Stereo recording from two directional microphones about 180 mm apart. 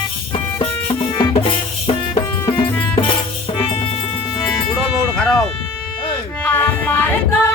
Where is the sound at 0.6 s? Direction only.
30° left (ahead or behind).